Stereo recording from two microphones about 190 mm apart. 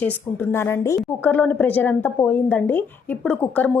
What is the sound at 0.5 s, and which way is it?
A woman's voice, 15° left (ahead or behind).